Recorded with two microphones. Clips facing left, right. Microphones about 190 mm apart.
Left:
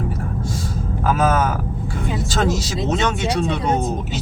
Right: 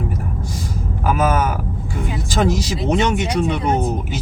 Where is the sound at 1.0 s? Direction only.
10° right (ahead or behind).